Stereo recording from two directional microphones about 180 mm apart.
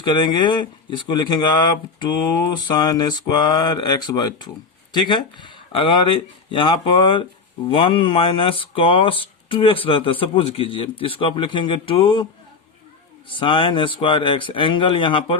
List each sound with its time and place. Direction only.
0.0 s speech: 25° left (ahead or behind)